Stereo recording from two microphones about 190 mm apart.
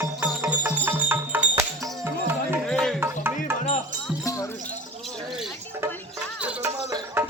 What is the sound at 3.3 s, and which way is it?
Music, 45° left (ahead or behind).